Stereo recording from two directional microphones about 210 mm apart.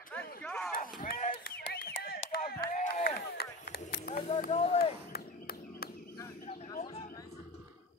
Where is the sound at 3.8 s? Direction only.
40° left (ahead or behind).